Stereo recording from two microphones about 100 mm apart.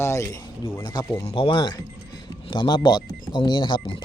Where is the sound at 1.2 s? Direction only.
60° left (ahead or behind).